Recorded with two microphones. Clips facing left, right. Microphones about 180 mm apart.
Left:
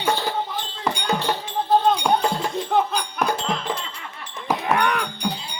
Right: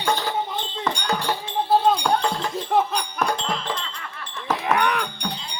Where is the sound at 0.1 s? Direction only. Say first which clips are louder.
Even; 15° right (ahead or behind).